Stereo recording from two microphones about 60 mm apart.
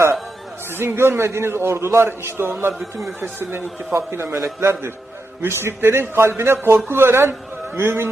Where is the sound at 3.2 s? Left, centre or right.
Right.